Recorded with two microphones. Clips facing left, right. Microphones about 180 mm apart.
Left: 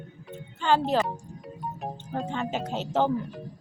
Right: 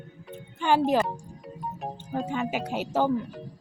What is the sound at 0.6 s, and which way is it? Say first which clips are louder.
Speech: even; 15° right (ahead or behind).